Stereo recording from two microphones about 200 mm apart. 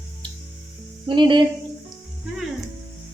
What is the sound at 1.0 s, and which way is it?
Speech, 25° right (ahead or behind).